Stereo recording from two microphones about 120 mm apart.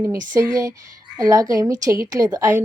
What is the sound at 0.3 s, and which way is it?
A woman's voice, 30° right (ahead or behind).